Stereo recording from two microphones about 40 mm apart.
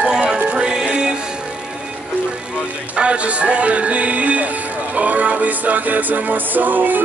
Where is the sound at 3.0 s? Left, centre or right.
Right.